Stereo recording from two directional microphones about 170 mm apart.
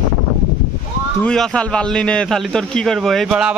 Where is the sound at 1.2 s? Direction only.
5° left (ahead or behind).